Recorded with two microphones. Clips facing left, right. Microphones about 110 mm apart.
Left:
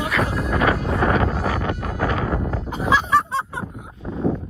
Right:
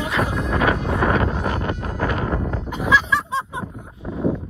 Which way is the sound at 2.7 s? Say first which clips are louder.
Right 1 dB; 35° left (ahead or behind).